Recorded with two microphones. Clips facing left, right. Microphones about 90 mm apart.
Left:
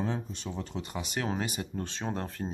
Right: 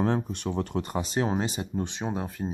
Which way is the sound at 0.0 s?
60° right (ahead or behind).